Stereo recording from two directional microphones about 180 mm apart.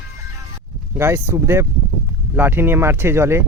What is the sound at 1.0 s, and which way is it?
Speech, 15° right (ahead or behind).